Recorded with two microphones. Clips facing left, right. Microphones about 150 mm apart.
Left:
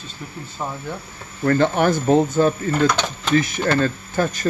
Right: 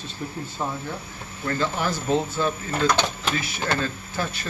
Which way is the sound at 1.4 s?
60° left (ahead or behind).